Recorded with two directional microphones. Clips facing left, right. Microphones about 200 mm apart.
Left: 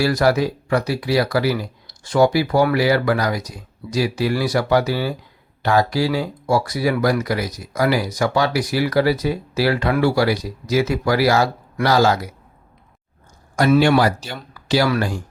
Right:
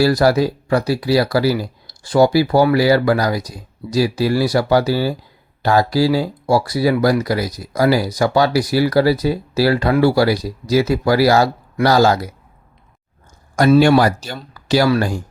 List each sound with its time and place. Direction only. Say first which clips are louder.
0.0 s speech: right 3 dB; 35° right (ahead or behind)
13.7 s speech: right 3 dB; 45° right (ahead or behind)